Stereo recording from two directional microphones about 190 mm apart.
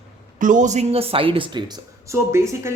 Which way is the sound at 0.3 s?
40° right (ahead or behind).